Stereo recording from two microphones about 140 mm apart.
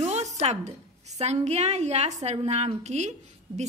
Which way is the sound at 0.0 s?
55° right (ahead or behind).